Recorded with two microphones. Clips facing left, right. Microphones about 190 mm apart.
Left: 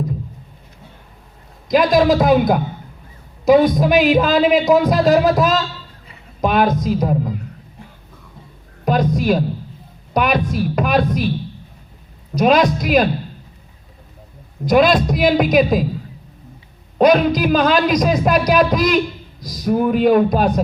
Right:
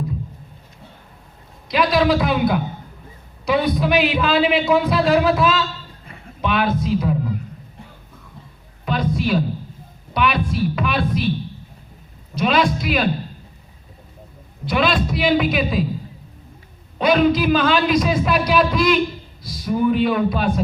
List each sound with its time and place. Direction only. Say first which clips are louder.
1.6 s a man's voice: left 4 dB; 45° left (ahead or behind)
8.8 s a sound: left 4 dB; 45° left (ahead or behind)
10.2 s a man's voice: left 3 dB; 45° left (ahead or behind)
12.3 s a man's voice: left 5 dB; 45° left (ahead or behind)
14.6 s a man's voice: left 6 dB; 40° left (ahead or behind)
17.0 s a man's voice: left 3 dB; 45° left (ahead or behind)